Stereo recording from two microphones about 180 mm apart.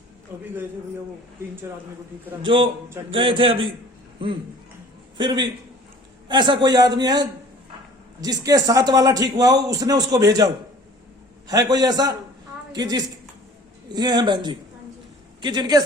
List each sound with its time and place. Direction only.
0.3 s a man's voice: 10° right (ahead or behind)
3.1 s a man's voice: 30° right (ahead or behind)
5.1 s a man's voice: 25° right (ahead or behind)